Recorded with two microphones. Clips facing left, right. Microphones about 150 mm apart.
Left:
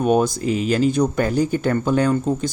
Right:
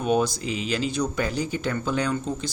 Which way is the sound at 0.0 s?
50° left (ahead or behind).